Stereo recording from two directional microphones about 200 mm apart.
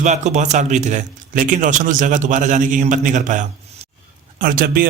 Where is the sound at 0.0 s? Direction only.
35° right (ahead or behind).